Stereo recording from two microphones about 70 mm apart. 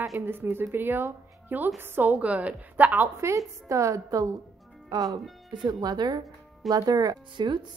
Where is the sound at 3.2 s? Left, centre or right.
Right.